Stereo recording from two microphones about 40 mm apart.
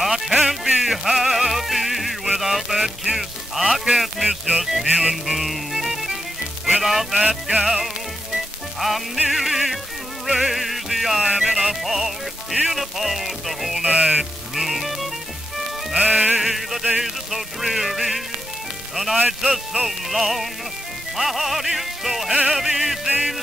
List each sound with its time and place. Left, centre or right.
0.0 s music: centre
13.8 s a man's voice: right
14.5 s music: centre
15.9 s music: centre
16.3 s music: centre
19.1 s a man's voice: right
19.9 s music: centre